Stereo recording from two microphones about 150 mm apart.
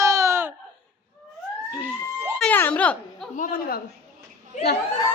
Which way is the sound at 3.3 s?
65° left (ahead or behind).